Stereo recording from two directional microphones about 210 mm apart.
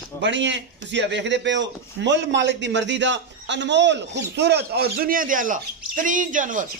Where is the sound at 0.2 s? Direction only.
60° right (ahead or behind).